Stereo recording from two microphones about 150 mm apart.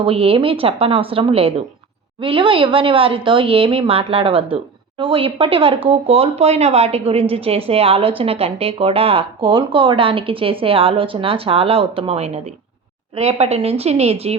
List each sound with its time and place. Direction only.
0.0 s a woman's voice: 40° right (ahead or behind)